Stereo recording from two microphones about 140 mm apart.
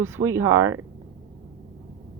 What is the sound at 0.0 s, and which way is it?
Speech, 20° right (ahead or behind).